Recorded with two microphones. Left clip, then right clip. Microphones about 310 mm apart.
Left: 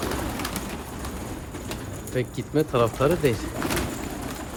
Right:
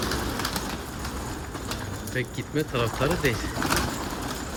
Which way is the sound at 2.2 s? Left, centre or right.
Centre.